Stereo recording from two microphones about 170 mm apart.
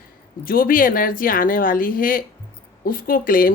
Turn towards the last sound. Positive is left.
turn(degrees=55)  # may be behind; listen again after turning